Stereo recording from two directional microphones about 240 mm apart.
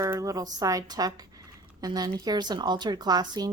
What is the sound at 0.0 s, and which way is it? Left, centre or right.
A woman's voice, centre.